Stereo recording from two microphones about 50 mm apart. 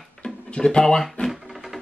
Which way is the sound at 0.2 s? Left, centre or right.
Centre.